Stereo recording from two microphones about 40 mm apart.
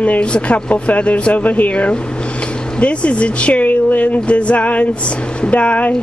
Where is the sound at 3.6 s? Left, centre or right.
Left.